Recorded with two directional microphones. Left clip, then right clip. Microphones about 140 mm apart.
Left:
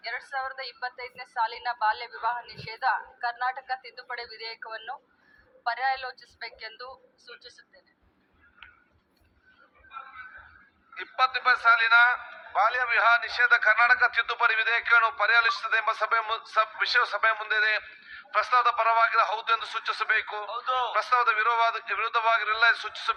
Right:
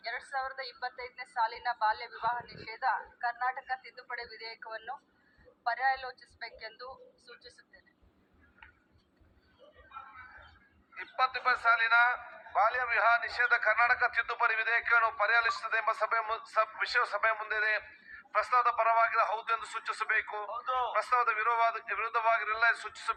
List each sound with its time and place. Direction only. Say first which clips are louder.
0.3 s a man's voice: left 3 dB; 25° left (ahead or behind)
9.9 s a sound: left 6 dB; 25° left (ahead or behind)
10.9 s a man's voice: left 5 dB; 20° left (ahead or behind)